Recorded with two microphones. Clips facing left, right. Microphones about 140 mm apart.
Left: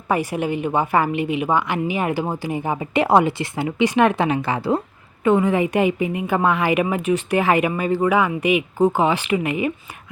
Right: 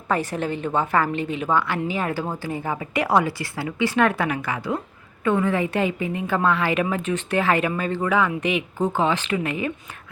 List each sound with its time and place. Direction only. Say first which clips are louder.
0.1 s a woman's voice: left 3 dB; 10° left (ahead or behind); by 4.8 s 30° left (ahead or behind)
5.2 s a woman's voice: left 4 dB; 15° left (ahead or behind)